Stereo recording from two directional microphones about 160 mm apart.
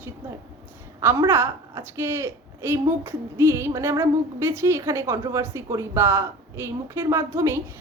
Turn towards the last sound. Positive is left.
turn(degrees=-20)  # may be behind; listen again after turning